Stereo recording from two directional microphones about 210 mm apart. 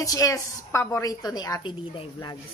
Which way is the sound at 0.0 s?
15° left (ahead or behind).